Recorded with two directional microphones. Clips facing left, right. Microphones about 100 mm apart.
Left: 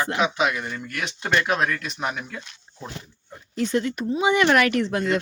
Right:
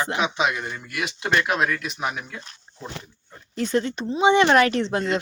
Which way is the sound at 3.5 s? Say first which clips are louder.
Even; 35° right (ahead or behind).